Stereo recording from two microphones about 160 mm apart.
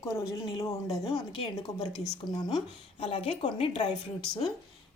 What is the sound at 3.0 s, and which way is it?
Speech, 40° left (ahead or behind).